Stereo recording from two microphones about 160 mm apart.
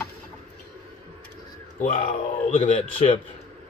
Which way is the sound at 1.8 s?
55° left (ahead or behind).